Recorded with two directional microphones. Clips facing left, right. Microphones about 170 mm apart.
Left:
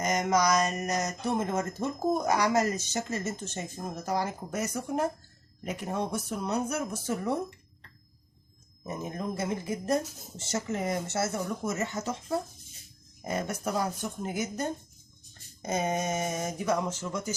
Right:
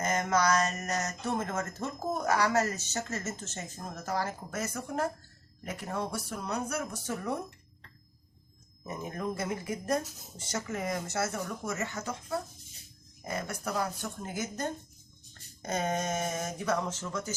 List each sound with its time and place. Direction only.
0.0 s speech: 15° left (ahead or behind)
8.9 s speech: 20° left (ahead or behind)